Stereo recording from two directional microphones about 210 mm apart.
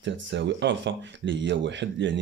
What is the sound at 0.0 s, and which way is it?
Speech, 55° right (ahead or behind).